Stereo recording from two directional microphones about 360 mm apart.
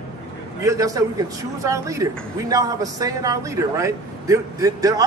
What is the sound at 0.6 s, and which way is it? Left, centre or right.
Speech, centre.